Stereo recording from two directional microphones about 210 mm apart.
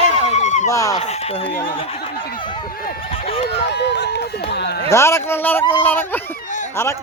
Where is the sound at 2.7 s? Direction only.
45° left (ahead or behind).